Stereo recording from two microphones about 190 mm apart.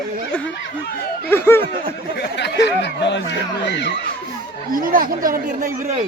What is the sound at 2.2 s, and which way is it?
Speech, 65° left (ahead or behind).